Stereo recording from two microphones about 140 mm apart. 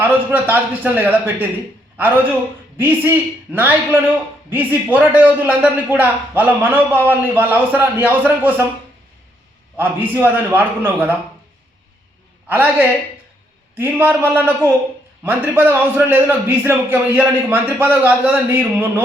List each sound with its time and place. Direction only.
0.0 s a man's voice: 15° right (ahead or behind)
9.7 s a man's voice: 15° right (ahead or behind)
12.5 s a man's voice: 15° right (ahead or behind)